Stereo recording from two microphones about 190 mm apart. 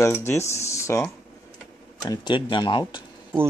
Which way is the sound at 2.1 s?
25° left (ahead or behind).